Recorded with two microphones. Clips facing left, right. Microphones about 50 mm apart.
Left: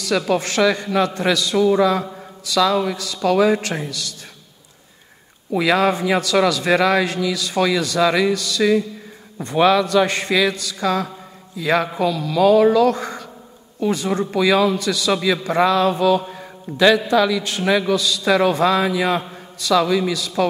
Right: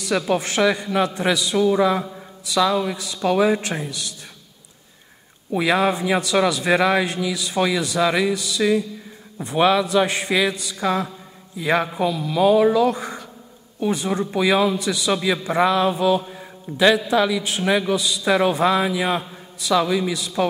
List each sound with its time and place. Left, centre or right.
0.3 s a man's voice: centre
2.7 s speech: centre
3.3 s a man's voice: centre
5.6 s a man's voice: centre